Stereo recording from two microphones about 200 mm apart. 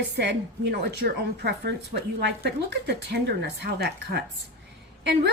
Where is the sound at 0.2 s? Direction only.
55° right (ahead or behind).